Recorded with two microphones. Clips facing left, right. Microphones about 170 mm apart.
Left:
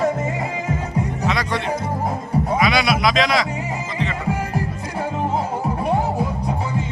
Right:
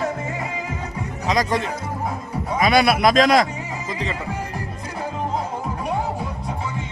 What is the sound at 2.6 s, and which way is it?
Speech, 50° right (ahead or behind).